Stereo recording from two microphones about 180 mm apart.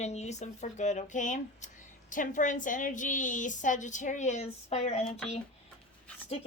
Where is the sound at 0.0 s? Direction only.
40° left (ahead or behind).